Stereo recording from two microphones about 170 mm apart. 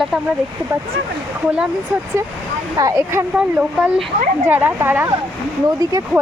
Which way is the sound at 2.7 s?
20° right (ahead or behind).